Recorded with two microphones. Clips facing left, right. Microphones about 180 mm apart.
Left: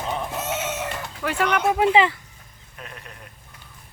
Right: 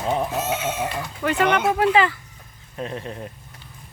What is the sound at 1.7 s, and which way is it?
Speech, 20° left (ahead or behind).